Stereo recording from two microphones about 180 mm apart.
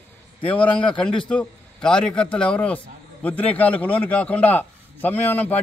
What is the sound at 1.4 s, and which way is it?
A man's voice, 5° left (ahead or behind).